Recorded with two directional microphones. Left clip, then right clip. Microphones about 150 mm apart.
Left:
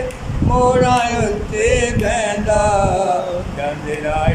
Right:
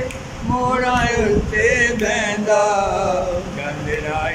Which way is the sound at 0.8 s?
20° left (ahead or behind).